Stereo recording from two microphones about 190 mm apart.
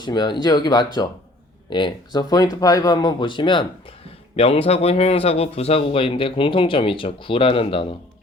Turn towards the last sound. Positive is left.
turn(degrees=30)  # may be behind; listen again after turning